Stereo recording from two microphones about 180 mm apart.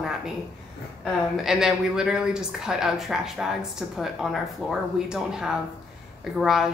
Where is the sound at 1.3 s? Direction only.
Centre (ahead or behind).